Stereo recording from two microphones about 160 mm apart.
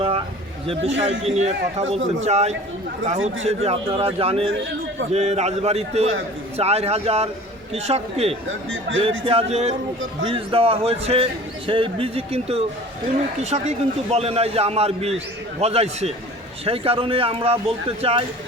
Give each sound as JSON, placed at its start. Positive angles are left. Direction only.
{"t": 0.7, "sound": "a man's voice", "side_deg": -40}